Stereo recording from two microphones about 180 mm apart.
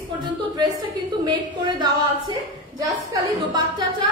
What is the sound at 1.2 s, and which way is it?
Speech, 25° right (ahead or behind).